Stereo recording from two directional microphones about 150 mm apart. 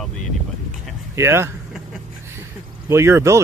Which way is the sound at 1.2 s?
15° right (ahead or behind).